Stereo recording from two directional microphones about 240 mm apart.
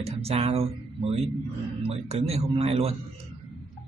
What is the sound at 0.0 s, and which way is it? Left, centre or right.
Speech, right.